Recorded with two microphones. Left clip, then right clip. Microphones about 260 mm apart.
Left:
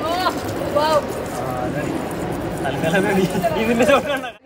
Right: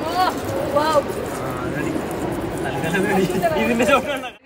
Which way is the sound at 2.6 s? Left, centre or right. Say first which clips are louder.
Left 4 dB; centre.